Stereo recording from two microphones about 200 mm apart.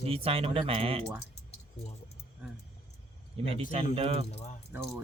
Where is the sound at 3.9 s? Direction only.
30° right (ahead or behind).